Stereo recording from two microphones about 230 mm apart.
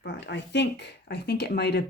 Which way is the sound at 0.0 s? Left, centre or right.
Left.